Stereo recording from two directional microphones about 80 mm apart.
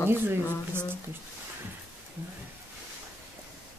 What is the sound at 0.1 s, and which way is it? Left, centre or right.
Speech, right.